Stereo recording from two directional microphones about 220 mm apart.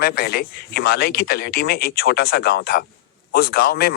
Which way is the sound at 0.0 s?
45° left (ahead or behind).